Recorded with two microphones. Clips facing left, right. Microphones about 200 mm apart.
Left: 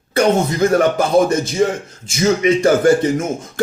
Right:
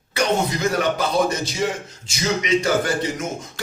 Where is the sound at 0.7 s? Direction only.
50° left (ahead or behind).